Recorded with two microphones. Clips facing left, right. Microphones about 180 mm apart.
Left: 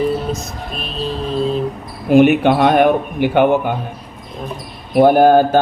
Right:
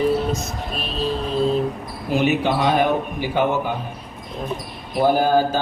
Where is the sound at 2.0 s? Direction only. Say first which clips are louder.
Left 9 dB; 60° left (ahead or behind).